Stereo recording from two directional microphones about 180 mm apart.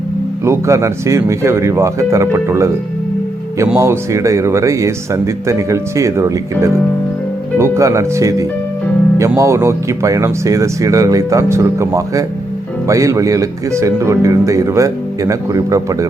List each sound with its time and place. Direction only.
0.4 s speech: 15° right (ahead or behind)
3.8 s speech: 15° right (ahead or behind)